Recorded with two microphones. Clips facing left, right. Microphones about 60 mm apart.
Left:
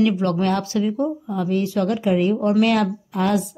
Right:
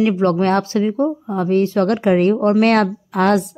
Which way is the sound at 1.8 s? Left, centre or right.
Right.